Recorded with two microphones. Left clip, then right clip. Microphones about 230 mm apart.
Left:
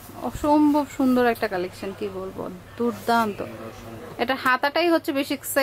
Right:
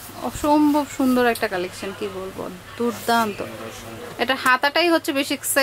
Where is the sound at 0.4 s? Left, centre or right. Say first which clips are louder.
Right 1 dB; centre.